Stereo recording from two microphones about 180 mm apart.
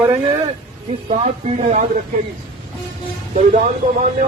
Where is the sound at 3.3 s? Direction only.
45° right (ahead or behind).